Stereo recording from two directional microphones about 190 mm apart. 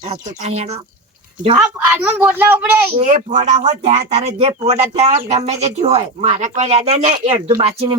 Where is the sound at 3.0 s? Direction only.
40° right (ahead or behind).